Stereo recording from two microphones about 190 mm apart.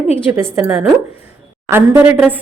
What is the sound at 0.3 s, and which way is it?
A woman's voice, 10° right (ahead or behind).